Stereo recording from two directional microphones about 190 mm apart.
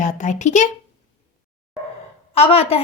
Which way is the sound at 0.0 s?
40° left (ahead or behind).